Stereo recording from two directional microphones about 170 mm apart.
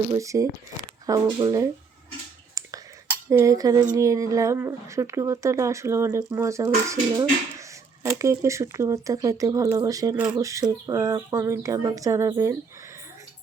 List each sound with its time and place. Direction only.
0.2 s speech: 20° right (ahead or behind)
2.6 s cutlery: 20° right (ahead or behind)
3.9 s speech: 20° right (ahead or behind)